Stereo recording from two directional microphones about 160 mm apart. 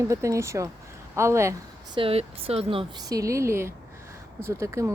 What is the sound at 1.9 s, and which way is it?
Speech, 35° right (ahead or behind).